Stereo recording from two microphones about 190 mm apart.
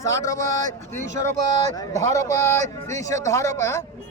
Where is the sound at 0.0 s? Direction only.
15° left (ahead or behind).